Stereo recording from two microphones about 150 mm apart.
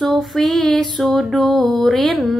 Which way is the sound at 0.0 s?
Centre (ahead or behind).